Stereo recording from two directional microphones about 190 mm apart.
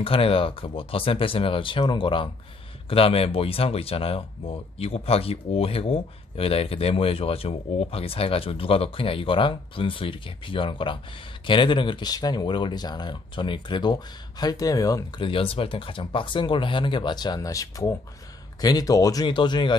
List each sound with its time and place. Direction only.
0.0 s speech: 30° left (ahead or behind)